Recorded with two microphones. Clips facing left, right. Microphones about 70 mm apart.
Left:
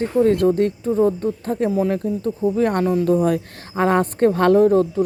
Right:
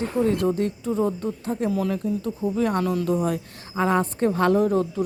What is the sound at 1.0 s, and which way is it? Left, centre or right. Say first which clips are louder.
Speech: left 7 dB; left.